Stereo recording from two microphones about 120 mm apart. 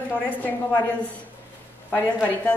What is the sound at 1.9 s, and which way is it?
Speech, 15° left (ahead or behind).